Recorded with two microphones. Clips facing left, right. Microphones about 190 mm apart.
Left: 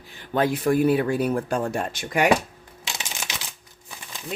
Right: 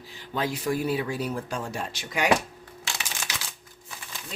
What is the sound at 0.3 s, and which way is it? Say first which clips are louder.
Speech: left 7 dB; 55° left (ahead or behind).